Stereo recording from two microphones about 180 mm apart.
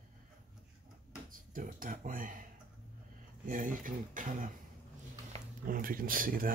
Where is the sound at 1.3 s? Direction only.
50° right (ahead or behind).